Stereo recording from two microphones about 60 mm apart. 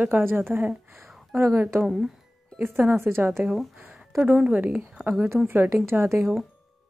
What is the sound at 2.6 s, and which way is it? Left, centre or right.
Speech, right.